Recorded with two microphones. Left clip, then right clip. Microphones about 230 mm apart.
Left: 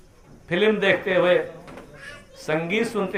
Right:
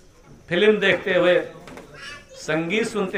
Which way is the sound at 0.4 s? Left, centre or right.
Centre.